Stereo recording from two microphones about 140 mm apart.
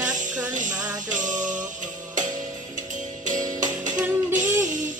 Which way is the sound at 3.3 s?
65° right (ahead or behind).